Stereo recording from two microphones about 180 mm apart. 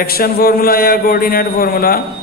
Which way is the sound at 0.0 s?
55° left (ahead or behind).